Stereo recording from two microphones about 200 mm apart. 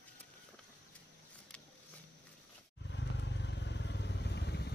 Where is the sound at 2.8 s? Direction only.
60° left (ahead or behind).